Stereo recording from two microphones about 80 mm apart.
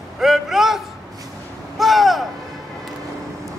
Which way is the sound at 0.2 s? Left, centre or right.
Centre.